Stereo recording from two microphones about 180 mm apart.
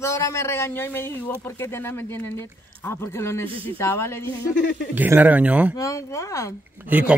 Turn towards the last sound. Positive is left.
turn(degrees=-10)  # may be behind; listen again after turning